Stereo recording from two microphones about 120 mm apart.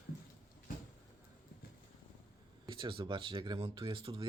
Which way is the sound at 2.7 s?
45° right (ahead or behind).